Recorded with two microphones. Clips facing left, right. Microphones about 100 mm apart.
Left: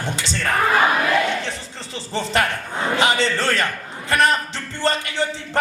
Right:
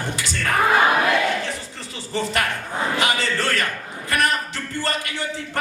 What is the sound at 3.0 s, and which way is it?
A man's voice, 30° left (ahead or behind).